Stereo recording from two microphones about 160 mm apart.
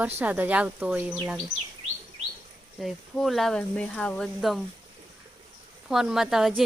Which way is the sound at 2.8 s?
Centre (ahead or behind).